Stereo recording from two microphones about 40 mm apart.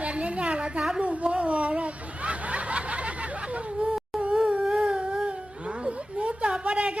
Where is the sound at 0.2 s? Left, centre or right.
Right.